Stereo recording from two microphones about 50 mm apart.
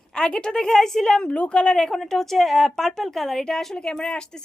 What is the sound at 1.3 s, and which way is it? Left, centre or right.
A woman's voice, left.